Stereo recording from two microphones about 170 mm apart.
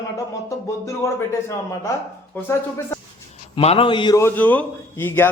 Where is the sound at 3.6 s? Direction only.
35° left (ahead or behind).